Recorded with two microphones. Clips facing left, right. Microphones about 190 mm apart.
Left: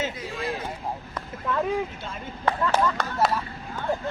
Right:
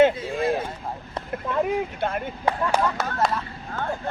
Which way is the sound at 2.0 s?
60° right (ahead or behind).